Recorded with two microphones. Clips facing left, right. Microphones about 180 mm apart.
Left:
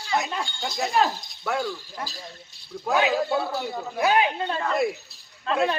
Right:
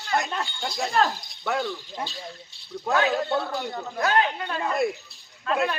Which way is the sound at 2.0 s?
25° right (ahead or behind).